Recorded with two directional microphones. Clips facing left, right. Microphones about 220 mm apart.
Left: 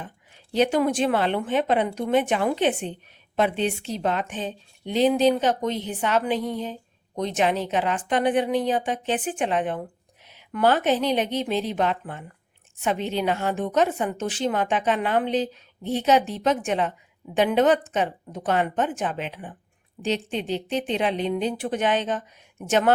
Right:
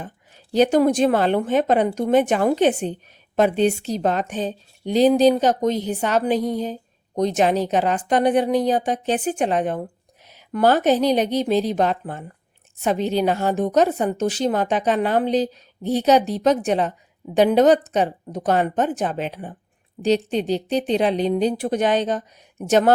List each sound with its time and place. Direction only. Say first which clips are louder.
0.5 s a woman's voice: right 5 dB; 40° right (ahead or behind)